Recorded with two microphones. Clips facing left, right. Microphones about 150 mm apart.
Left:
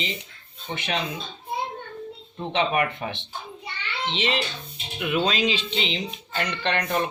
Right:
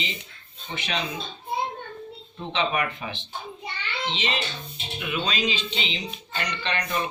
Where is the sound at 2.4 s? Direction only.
50° left (ahead or behind).